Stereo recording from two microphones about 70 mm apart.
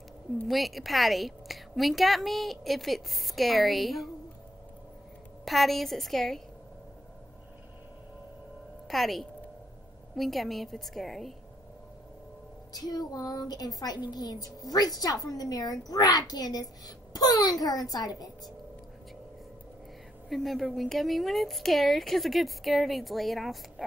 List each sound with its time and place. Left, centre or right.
0.5 s a woman's voice: centre
5.4 s a woman's voice: centre
8.8 s a woman's voice: centre
12.7 s a child's voice: left
20.2 s a woman's voice: centre